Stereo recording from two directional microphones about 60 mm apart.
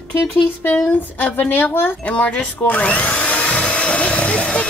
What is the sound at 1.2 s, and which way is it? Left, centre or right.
Speech, left.